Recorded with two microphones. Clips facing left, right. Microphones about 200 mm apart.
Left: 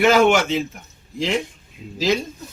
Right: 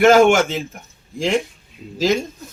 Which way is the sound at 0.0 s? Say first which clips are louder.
Right 3 dB; 50° right (ahead or behind).